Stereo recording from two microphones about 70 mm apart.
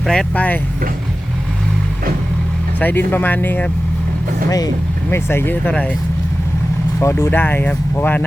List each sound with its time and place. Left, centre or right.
0.1 s speech: centre
2.8 s speech: left
4.4 s speech: left
5.1 s speech: left
5.6 s speech: centre
7.0 s speech: left
7.3 s speech: left